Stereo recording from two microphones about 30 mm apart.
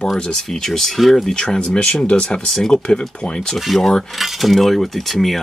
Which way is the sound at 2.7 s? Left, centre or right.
Left.